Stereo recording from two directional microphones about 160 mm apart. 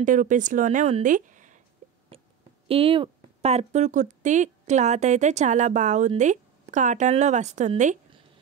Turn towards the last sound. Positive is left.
turn(degrees=-45)  # may be behind; listen again after turning